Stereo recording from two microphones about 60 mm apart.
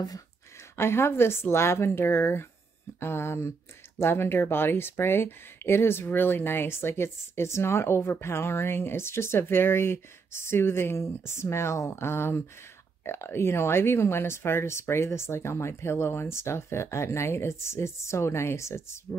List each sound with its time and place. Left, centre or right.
0.7 s speech: left